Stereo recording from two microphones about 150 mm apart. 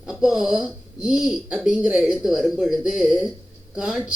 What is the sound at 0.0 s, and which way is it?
A woman's voice, 5° right (ahead or behind).